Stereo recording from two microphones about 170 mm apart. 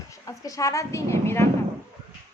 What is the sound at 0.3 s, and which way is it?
A woman's voice, 20° left (ahead or behind).